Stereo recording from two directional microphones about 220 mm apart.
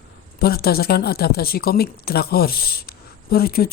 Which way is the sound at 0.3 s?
45° left (ahead or behind).